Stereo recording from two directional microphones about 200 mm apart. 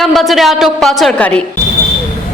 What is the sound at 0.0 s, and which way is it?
A woman's voice, centre (ahead or behind).